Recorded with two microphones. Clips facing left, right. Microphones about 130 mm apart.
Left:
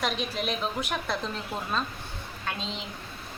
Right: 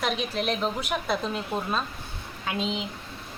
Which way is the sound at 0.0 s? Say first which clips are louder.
Right 2 dB; centre (ahead or behind).